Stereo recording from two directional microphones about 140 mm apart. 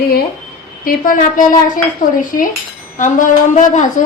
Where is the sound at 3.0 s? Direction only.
65° left (ahead or behind).